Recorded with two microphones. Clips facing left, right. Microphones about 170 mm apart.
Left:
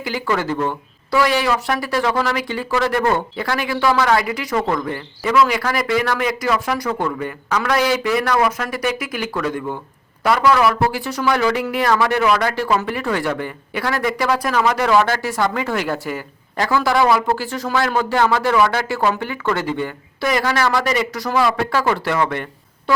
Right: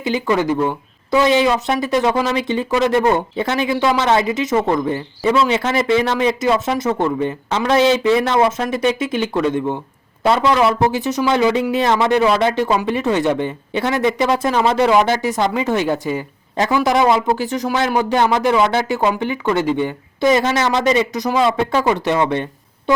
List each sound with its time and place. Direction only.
0.0 s speech: 20° right (ahead or behind)